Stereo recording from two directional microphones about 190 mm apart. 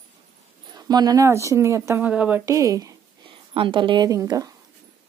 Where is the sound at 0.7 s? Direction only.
20° right (ahead or behind).